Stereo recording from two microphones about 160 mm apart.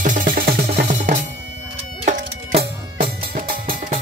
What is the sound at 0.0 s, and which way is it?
Music, 55° right (ahead or behind).